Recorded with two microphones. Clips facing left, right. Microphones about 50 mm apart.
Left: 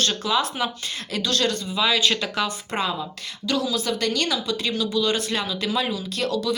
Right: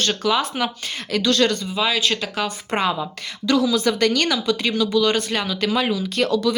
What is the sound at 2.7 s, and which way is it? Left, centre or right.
Speech, right.